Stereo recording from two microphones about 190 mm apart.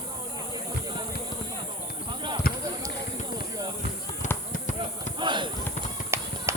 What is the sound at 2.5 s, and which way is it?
Basketball bounce, 50° left (ahead or behind).